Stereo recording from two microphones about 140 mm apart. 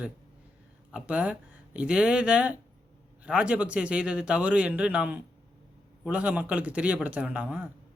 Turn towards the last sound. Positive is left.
turn(degrees=-10)  # may be behind; listen again after turning